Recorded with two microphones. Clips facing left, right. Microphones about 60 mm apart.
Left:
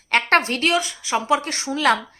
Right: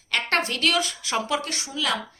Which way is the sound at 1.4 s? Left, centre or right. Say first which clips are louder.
Left 3 dB; left.